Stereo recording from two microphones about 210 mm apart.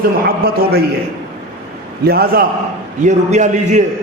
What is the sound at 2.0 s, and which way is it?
A man's voice, 45° right (ahead or behind).